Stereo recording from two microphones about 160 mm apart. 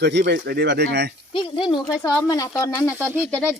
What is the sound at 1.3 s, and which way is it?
Speech, 30° left (ahead or behind).